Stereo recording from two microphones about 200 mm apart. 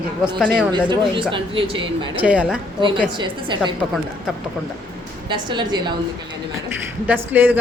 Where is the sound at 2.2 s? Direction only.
5° right (ahead or behind).